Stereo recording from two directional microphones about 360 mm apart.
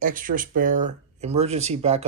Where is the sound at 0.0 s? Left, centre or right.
Right.